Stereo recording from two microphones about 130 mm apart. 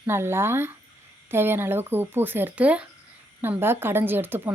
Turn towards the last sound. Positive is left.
turn(degrees=-15)  # may be behind; listen again after turning